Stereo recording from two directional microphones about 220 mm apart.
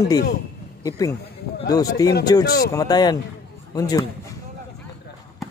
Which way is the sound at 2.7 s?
15° left (ahead or behind).